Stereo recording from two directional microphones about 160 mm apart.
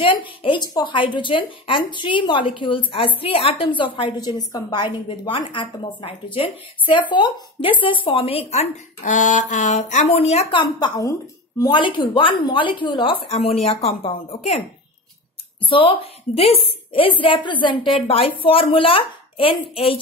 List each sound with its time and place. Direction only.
0.0 s speech: 30° left (ahead or behind)
15.6 s speech: 35° left (ahead or behind)